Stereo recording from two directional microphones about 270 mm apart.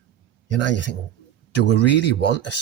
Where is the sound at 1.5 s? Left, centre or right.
Left.